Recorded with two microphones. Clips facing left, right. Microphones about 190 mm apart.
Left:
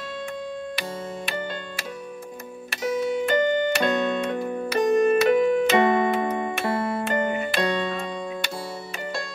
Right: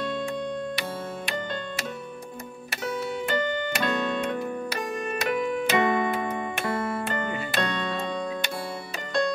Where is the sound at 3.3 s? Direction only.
20° left (ahead or behind).